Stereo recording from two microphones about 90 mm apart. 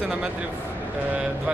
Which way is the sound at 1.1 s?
15° right (ahead or behind).